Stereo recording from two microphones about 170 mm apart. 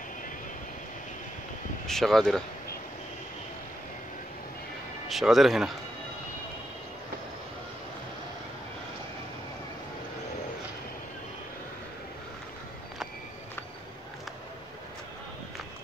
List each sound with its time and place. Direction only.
1.9 s speech: centre (ahead or behind)
5.0 s speech: centre (ahead or behind)